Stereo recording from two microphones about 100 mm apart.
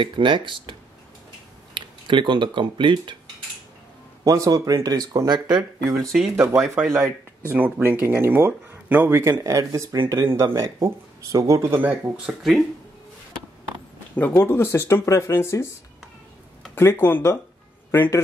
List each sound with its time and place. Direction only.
0.0 s speech: 55° right (ahead or behind)
4.2 s speech: 35° right (ahead or behind)
6.3 s speech: 30° right (ahead or behind)
7.4 s speech: 15° right (ahead or behind)
9.4 s speech: 35° right (ahead or behind)
11.6 s speech: 20° right (ahead or behind)
14.1 s speech: 20° left (ahead or behind)
16.7 s speech: 20° left (ahead or behind)